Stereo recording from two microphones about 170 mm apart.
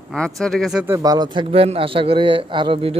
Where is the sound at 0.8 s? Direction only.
20° right (ahead or behind).